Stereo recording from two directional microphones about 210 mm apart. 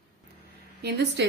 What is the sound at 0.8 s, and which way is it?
Speech, 55° right (ahead or behind).